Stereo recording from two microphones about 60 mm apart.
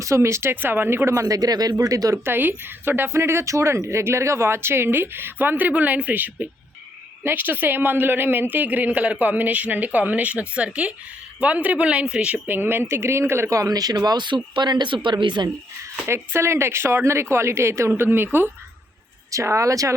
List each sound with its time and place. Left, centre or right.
0.0 s speech: right
0.5 s speech: right
2.2 s speech: right; by 12.4 s centre
12.5 s speech: right
13.6 s speech: right
16.0 s speech: right
17.9 s speech: right
19.3 s speech: right